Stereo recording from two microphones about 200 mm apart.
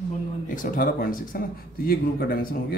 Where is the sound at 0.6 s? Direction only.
45° left (ahead or behind).